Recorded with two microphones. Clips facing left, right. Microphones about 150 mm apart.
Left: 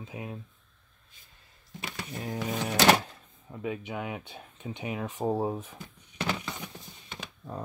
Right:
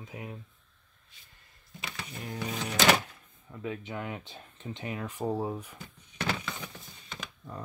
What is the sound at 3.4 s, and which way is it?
Speech, 15° left (ahead or behind).